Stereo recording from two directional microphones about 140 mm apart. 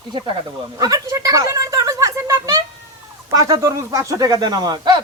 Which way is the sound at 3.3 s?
20° right (ahead or behind).